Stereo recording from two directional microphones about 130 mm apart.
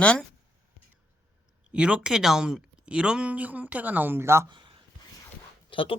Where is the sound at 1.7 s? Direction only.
10° right (ahead or behind).